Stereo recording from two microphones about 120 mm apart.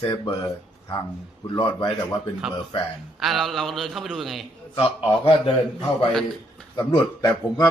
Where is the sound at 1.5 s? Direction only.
40° left (ahead or behind).